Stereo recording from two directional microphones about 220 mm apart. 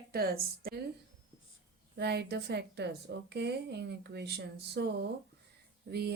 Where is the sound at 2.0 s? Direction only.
45° right (ahead or behind).